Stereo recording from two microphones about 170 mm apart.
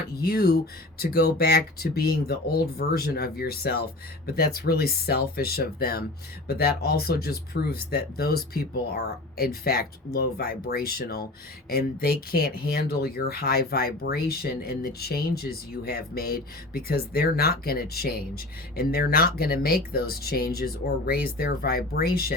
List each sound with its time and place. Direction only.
0.2 s speech: 65° left (ahead or behind)